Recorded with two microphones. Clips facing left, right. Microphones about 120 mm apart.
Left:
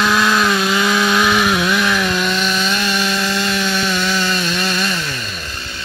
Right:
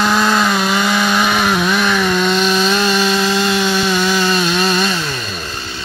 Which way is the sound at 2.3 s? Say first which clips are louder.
Right 5 dB; 30° right (ahead or behind).